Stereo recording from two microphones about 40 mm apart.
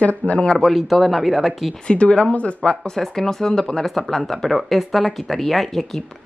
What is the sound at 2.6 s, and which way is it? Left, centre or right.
Speech, centre.